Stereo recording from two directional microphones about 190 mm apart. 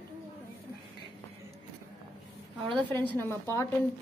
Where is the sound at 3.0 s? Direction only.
10° left (ahead or behind).